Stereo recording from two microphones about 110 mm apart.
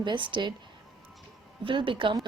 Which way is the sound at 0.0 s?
45° right (ahead or behind).